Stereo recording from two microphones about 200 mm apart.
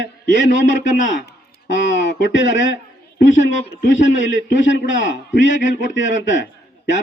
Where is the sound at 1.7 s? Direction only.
70° left (ahead or behind).